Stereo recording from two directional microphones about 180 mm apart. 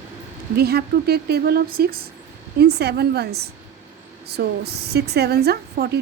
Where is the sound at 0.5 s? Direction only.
60° right (ahead or behind).